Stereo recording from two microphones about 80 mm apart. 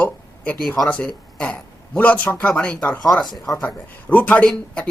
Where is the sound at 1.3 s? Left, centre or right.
Centre.